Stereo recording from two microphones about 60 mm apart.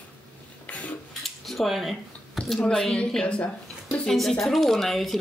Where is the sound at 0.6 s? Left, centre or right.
Left.